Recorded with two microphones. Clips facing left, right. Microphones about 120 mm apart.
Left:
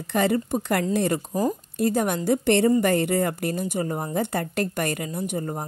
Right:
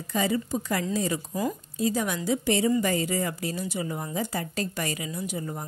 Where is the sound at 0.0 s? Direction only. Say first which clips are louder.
Left 4 dB; 60° left (ahead or behind).